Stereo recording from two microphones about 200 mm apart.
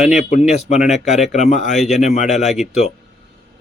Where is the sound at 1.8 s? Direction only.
Centre (ahead or behind).